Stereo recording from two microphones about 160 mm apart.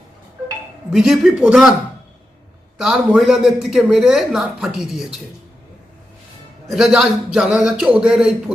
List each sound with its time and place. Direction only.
0.9 s speech: 5° right (ahead or behind)
2.7 s speech: 5° right (ahead or behind)
6.7 s speech: centre (ahead or behind)